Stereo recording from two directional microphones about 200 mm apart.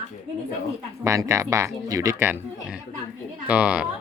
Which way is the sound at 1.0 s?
15° right (ahead or behind).